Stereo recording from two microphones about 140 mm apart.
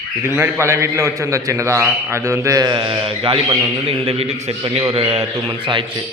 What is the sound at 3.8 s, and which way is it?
A man's voice, 45° right (ahead or behind).